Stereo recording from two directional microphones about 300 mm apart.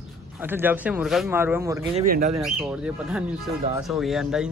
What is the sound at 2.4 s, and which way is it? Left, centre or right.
Speech, centre.